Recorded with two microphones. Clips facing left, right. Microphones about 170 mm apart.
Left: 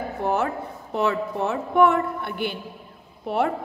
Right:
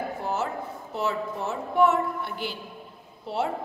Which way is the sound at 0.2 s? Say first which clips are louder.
Left 7 dB; 60° left (ahead or behind).